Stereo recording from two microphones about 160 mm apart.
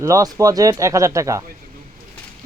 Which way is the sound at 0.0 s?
20° right (ahead or behind).